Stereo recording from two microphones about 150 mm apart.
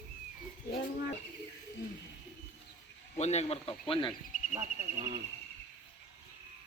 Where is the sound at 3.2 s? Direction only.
45° left (ahead or behind).